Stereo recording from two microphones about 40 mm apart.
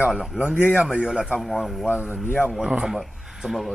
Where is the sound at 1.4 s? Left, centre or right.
Centre.